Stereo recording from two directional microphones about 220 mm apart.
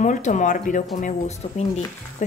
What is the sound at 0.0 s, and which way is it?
A woman's voice, 35° left (ahead or behind).